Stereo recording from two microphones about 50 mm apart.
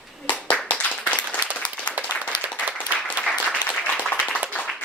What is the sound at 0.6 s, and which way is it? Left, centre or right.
Clapping, left.